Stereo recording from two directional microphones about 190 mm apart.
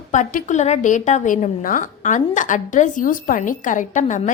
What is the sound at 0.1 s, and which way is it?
A woman's voice, 45° left (ahead or behind).